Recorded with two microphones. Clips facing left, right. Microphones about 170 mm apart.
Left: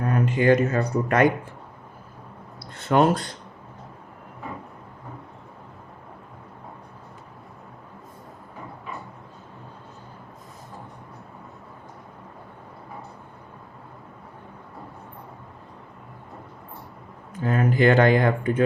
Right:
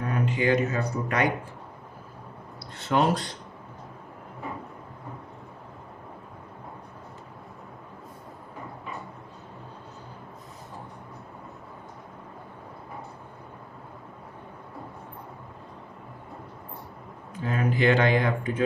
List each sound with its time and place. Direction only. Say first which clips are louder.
0.0 s speech: left 5 dB; 45° left (ahead or behind)
2.7 s speech: left 4 dB; 50° left (ahead or behind)
17.4 s speech: left 4 dB; 50° left (ahead or behind)